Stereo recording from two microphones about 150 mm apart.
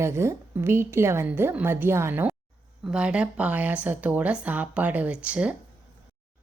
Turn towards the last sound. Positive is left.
turn(degrees=-10)  # may be behind; listen again after turning